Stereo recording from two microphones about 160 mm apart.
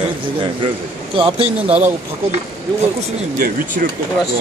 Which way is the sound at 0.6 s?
35° right (ahead or behind).